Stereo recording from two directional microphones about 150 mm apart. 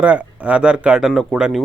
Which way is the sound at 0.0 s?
10° right (ahead or behind).